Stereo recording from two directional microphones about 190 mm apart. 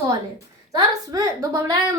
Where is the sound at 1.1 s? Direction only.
15° right (ahead or behind).